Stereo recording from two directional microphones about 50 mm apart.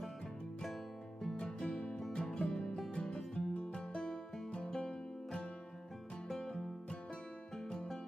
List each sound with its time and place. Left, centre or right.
1.2 s music: centre
2.9 s music: centre
4.5 s music: left